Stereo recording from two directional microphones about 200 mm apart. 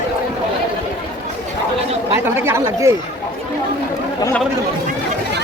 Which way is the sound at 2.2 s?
10° right (ahead or behind).